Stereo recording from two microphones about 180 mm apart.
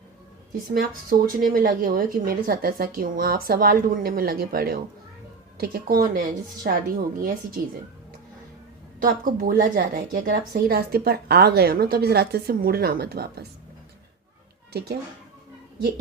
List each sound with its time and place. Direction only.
0.7 s a woman's voice: 55° right (ahead or behind)
9.0 s a woman's voice: 50° right (ahead or behind)
14.7 s speech: 65° right (ahead or behind)